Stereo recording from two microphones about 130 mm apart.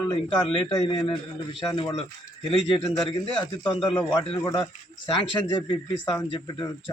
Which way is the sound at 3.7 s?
40° left (ahead or behind).